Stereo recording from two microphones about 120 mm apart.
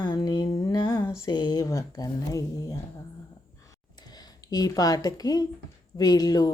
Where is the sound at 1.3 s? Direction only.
35° left (ahead or behind).